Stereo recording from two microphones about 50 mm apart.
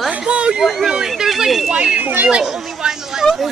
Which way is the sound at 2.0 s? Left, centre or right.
Right.